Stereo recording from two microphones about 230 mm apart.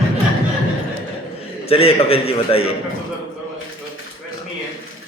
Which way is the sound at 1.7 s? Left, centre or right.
Left.